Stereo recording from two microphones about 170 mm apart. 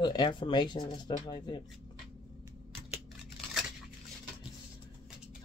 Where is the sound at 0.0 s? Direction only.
25° left (ahead or behind).